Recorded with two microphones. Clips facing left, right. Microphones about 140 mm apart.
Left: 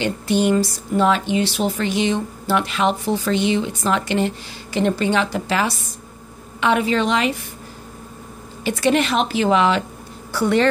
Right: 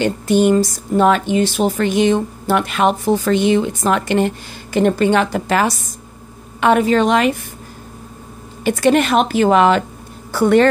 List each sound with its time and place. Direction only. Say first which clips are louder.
0.0 s speech: right 5 dB; 45° right (ahead or behind)
8.6 s speech: right 4 dB; 50° right (ahead or behind)